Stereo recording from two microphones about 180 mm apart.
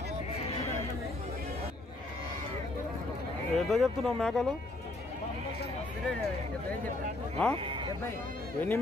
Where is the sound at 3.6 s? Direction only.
Centre (ahead or behind).